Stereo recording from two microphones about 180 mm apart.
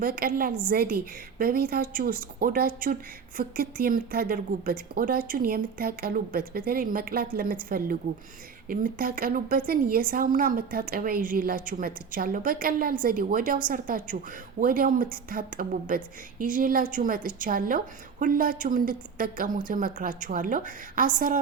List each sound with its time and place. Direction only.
0.0 s a woman's voice: 55° right (ahead or behind)